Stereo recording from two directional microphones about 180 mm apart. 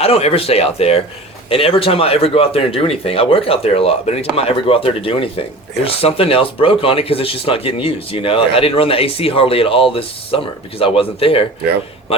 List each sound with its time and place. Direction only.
0.0 s speech: 35° left (ahead or behind)